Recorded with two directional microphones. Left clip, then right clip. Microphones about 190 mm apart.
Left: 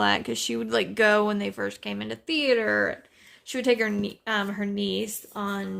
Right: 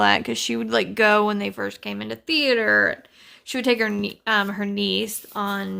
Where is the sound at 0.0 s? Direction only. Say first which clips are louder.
Right 5 dB; 15° right (ahead or behind).